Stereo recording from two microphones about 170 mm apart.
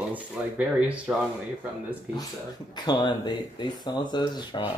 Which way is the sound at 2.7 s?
25° left (ahead or behind).